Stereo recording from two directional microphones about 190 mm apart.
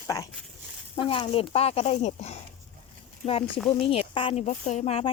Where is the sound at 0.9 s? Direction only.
25° left (ahead or behind).